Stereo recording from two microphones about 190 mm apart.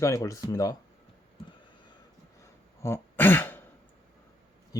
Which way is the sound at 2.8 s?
10° left (ahead or behind).